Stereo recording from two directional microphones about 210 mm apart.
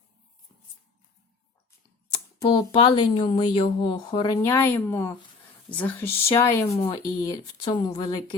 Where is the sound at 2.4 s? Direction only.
20° left (ahead or behind).